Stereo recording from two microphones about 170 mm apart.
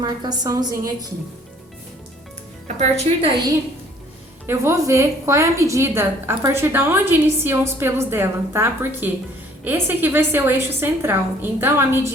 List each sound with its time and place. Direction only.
0.0 s a woman's voice: 25° right (ahead or behind)
2.6 s a woman's voice: 40° right (ahead or behind)
4.4 s a woman's voice: 15° right (ahead or behind)